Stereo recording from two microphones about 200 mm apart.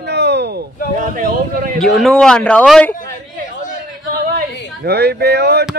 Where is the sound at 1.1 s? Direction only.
40° right (ahead or behind).